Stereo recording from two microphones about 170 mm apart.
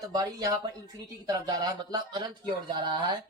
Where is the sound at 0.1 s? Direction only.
25° right (ahead or behind).